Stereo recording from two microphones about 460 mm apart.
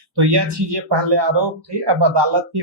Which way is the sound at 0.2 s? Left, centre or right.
Right.